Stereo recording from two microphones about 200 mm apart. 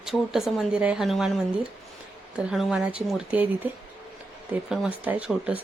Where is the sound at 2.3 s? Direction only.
5° right (ahead or behind).